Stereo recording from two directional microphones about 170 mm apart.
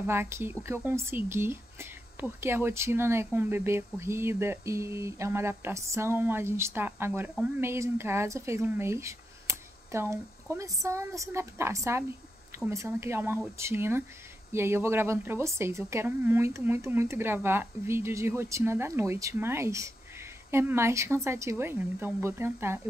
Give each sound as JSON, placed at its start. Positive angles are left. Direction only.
{"t": 0.0, "sound": "speech", "side_deg": -15}